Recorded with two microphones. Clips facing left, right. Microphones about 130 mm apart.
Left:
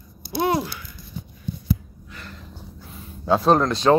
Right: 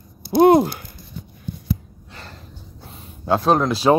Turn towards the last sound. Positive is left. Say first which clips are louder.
# right 1 dB
turn(degrees=-5)  # may be behind; listen again after turning